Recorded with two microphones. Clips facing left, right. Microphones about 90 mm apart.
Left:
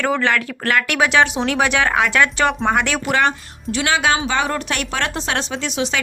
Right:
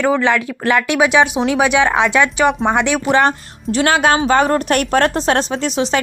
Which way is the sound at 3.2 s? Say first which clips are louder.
Right 4 dB; 35° right (ahead or behind).